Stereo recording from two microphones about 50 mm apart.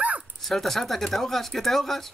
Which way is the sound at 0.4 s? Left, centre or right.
Centre.